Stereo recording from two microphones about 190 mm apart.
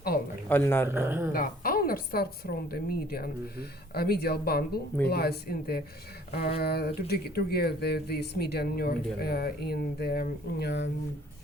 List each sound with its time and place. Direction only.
0.4 s speech: 10° left (ahead or behind)
0.9 s speech: 10° right (ahead or behind)
1.3 s a woman's voice: 50° left (ahead or behind)